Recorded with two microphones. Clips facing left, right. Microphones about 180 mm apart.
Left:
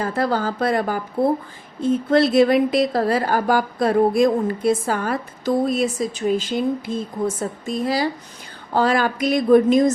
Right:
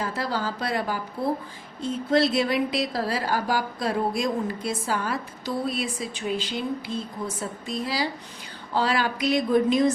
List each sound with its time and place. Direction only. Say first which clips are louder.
0.0 s speech: left 7 dB; 50° left (ahead or behind)